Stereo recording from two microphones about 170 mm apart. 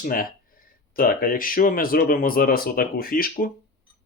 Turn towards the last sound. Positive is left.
turn(degrees=55)  # may be behind; listen again after turning